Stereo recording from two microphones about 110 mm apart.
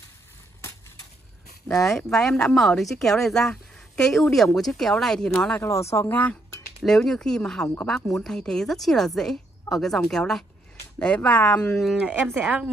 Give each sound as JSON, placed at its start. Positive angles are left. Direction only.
{"t": 1.7, "sound": "speech", "side_deg": 5}
{"t": 5.6, "sound": "speech", "side_deg": 25}
{"t": 6.8, "sound": "speech", "side_deg": 5}
{"t": 12.0, "sound": "speech", "side_deg": -10}